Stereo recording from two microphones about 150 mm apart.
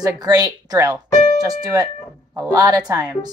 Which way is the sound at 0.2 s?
25° right (ahead or behind).